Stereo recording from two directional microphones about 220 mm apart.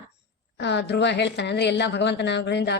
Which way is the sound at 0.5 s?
50° left (ahead or behind).